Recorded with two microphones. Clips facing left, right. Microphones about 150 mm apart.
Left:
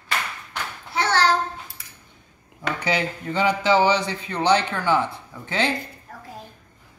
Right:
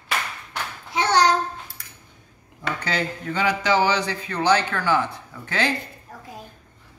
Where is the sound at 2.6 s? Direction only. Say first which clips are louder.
Left 2 dB; 10° left (ahead or behind).